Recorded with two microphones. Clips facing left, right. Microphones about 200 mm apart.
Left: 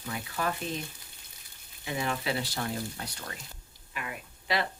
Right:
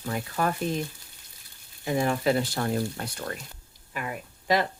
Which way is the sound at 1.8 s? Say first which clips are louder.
Right 8 dB; 45° right (ahead or behind).